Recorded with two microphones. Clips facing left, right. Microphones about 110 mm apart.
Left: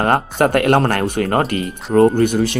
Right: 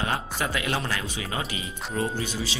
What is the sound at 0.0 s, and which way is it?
Speech, 55° left (ahead or behind).